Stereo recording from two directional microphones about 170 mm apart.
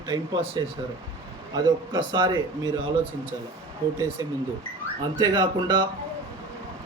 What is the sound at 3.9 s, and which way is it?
A man's voice, 15° right (ahead or behind).